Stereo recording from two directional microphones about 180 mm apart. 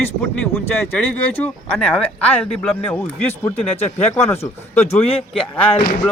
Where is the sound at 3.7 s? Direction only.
35° left (ahead or behind).